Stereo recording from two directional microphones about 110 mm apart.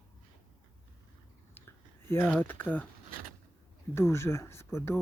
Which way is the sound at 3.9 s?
20° left (ahead or behind).